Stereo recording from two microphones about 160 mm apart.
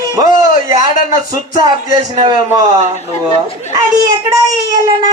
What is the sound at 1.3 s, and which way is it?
A child's voice, 25° right (ahead or behind).